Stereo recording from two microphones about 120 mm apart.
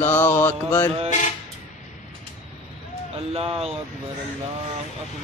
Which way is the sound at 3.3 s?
55° right (ahead or behind).